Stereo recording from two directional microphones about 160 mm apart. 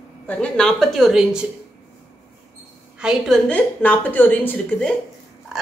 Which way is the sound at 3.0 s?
Centre (ahead or behind).